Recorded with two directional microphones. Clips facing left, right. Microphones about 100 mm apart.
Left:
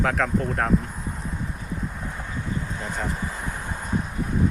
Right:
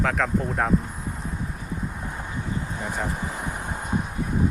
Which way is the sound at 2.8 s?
15° right (ahead or behind).